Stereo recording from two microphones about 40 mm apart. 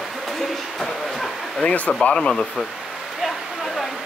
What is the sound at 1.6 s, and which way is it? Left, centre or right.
Speech, left.